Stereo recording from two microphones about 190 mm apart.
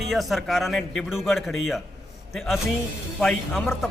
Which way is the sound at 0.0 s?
Centre (ahead or behind).